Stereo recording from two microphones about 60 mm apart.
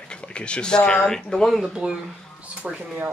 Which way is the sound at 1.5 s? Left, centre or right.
Centre.